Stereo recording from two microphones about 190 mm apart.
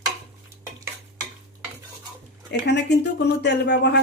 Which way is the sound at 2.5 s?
65° left (ahead or behind).